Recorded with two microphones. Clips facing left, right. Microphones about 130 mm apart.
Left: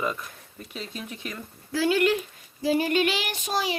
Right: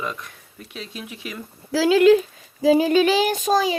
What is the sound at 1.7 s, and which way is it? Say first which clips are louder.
Speech: right 6 dB; 90° right.